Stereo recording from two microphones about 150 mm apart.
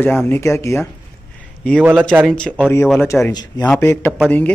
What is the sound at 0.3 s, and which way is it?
Speech, 20° left (ahead or behind).